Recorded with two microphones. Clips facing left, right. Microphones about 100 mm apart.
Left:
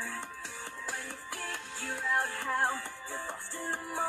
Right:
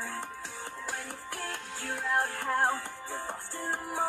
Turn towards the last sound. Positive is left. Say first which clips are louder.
# right 2 dB
turn(degrees=-20)  # may be behind; listen again after turning